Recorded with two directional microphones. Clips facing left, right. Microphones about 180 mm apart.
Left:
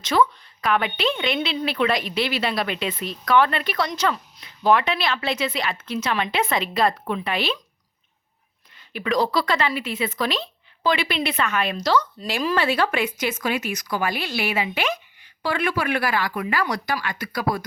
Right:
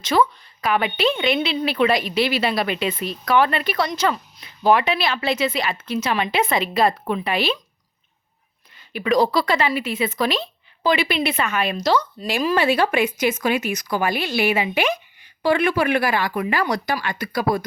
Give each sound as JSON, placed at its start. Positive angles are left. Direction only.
{"t": 0.0, "sound": "a woman's voice", "side_deg": -5}
{"t": 8.9, "sound": "a woman's voice", "side_deg": -10}